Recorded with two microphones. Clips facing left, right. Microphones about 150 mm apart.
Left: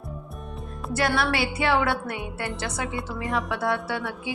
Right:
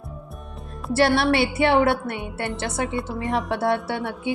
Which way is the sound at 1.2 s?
25° right (ahead or behind).